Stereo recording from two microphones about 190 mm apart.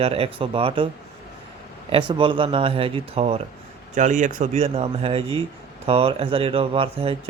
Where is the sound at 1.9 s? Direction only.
25° right (ahead or behind).